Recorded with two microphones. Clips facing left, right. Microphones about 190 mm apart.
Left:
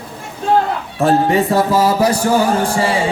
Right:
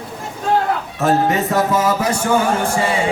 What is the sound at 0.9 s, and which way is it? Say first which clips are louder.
Speech: left 4 dB; 30° left (ahead or behind).